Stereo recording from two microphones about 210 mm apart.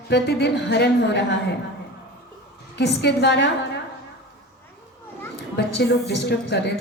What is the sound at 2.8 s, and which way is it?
Speech, 55° left (ahead or behind).